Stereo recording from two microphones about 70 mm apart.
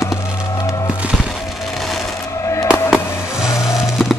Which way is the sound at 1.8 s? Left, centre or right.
Centre.